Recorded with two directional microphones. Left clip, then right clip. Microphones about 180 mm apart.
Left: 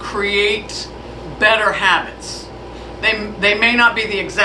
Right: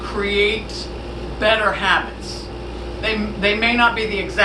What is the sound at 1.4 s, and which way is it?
Speech, 25° left (ahead or behind).